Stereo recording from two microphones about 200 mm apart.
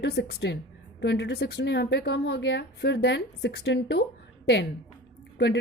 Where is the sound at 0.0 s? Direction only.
55° left (ahead or behind).